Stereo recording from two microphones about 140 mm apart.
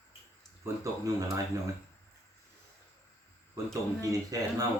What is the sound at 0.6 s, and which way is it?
Speech, 20° right (ahead or behind).